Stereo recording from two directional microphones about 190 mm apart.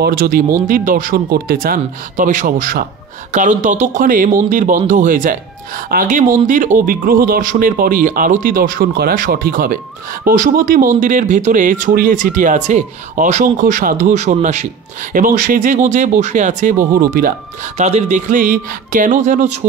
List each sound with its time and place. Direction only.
0.0 s speech: 50° right (ahead or behind)
17.7 s speech: 35° right (ahead or behind)